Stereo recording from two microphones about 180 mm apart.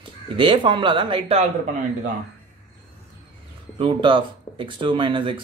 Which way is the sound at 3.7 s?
25° right (ahead or behind).